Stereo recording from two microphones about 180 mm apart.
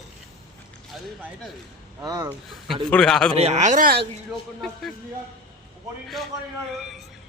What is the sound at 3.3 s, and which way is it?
Speech, 35° right (ahead or behind).